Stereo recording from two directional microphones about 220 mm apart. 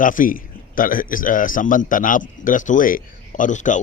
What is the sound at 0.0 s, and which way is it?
Speech, 35° left (ahead or behind).